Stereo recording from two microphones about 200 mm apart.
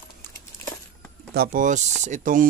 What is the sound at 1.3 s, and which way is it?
Speech, 45° right (ahead or behind).